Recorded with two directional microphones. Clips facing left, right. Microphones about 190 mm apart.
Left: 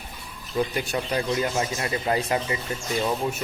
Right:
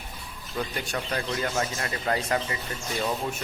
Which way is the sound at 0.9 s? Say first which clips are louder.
Left 4 dB; 15° left (ahead or behind).